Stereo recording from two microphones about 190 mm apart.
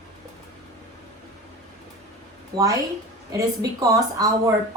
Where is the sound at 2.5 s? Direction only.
15° right (ahead or behind).